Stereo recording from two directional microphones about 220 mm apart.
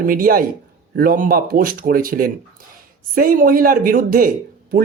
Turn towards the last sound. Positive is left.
turn(degrees=-40)  # may be behind; listen again after turning